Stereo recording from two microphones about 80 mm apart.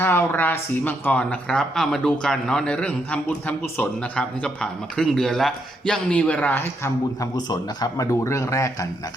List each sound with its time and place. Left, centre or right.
0.0 s speech: left
1.2 s a man's voice: centre
7.3 s speech: left